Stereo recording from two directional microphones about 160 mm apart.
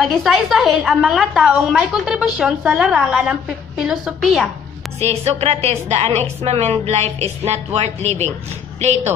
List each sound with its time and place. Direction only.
0.0 s a woman's voice: centre (ahead or behind)
5.0 s a woman's voice: 40° right (ahead or behind)